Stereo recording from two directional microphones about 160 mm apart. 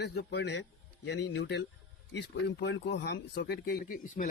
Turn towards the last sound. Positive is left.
turn(degrees=65)  # may be behind; listen again after turning